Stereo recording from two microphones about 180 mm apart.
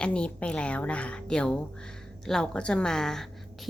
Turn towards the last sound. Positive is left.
turn(degrees=5)  # may be behind; listen again after turning